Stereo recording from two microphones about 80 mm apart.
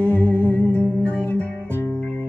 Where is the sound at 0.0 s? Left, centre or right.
Centre.